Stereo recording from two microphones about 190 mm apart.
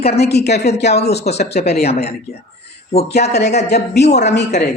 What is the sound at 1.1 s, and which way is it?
A man's voice, 35° left (ahead or behind).